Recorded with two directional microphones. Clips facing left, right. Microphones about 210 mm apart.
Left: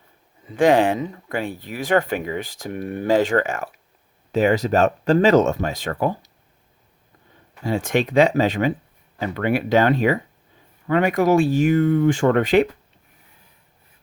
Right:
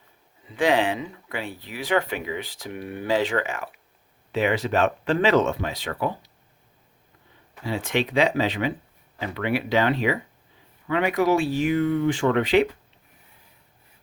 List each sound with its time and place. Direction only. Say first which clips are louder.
0.4 s speech: left 6 dB; 45° left (ahead or behind)
7.6 s speech: left 4 dB; 45° left (ahead or behind)